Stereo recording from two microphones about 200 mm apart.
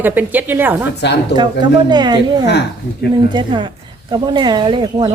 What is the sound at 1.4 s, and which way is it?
Speech, 20° right (ahead or behind).